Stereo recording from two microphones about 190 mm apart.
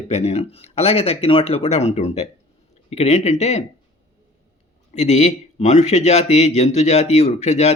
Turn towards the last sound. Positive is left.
turn(degrees=35)  # may be behind; listen again after turning